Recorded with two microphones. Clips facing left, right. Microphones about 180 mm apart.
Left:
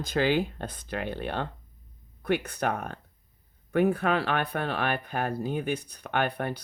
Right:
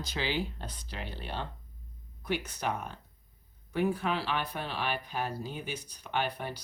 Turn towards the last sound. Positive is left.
turn(degrees=60)  # may be behind; listen again after turning